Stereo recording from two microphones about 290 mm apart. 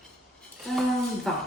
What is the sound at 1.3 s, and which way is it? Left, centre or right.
Speech, centre.